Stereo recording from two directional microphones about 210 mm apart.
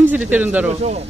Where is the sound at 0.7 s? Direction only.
30° right (ahead or behind).